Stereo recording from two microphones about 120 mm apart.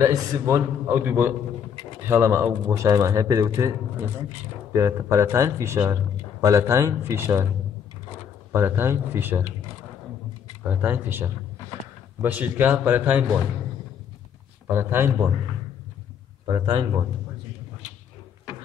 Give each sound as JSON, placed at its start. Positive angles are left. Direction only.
{"t": 0.0, "sound": "a man's voice", "side_deg": -25}
{"t": 4.7, "sound": "a man's voice", "side_deg": -25}
{"t": 8.5, "sound": "a man's voice", "side_deg": -20}
{"t": 10.7, "sound": "a man's voice", "side_deg": -15}
{"t": 14.7, "sound": "a man's voice", "side_deg": -20}
{"t": 16.4, "sound": "a man's voice", "side_deg": -40}